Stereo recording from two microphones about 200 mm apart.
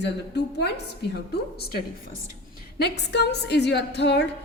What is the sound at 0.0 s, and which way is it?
A woman's voice, 60° left (ahead or behind).